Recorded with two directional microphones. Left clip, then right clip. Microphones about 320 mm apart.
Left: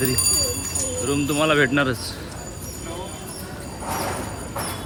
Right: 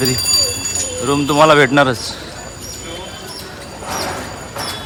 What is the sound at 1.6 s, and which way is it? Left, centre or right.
Speech, centre.